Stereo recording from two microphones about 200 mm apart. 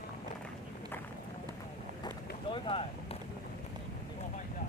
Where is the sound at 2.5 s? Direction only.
25° left (ahead or behind).